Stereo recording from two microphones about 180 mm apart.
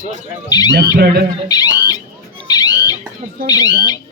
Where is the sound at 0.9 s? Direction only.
60° right (ahead or behind).